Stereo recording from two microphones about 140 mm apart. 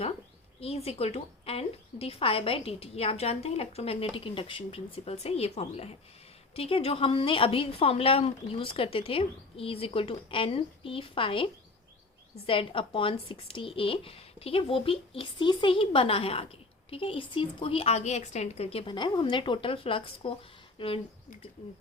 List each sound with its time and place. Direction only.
0.6 s a woman's voice: 45° left (ahead or behind)